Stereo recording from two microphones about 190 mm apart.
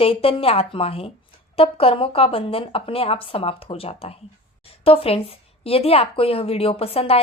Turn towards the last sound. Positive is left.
turn(degrees=30)  # may be behind; listen again after turning